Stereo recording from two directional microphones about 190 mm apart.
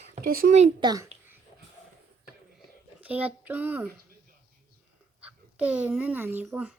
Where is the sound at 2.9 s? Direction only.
10° right (ahead or behind).